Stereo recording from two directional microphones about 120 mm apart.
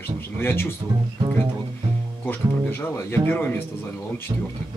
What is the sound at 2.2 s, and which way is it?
Speech, 20° left (ahead or behind).